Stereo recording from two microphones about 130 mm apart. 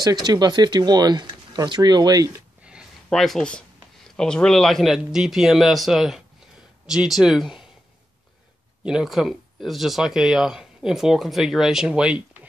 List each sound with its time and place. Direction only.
0.0 s speech: 30° right (ahead or behind)
2.6 s a sound: 5° right (ahead or behind)
3.1 s speech: 5° left (ahead or behind)
8.8 s speech: 5° right (ahead or behind)